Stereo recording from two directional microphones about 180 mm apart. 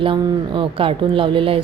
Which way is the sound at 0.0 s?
30° right (ahead or behind).